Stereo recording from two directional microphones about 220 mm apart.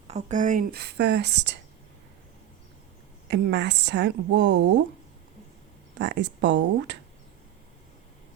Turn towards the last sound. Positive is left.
turn(degrees=-55)  # may be behind; listen again after turning